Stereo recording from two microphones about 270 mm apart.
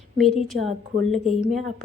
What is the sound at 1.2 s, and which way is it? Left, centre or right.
Speech, left.